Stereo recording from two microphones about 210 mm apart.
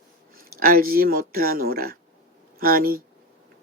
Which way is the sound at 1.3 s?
45° right (ahead or behind).